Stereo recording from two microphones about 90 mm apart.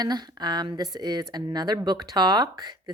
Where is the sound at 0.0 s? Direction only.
50° right (ahead or behind).